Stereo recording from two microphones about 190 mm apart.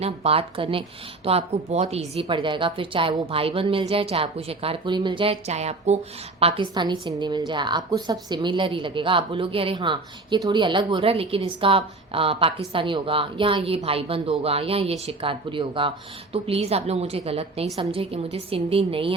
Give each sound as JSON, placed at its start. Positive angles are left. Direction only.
{"t": 0.0, "sound": "a woman's voice", "side_deg": -30}
{"t": 6.4, "sound": "a woman's voice", "side_deg": -25}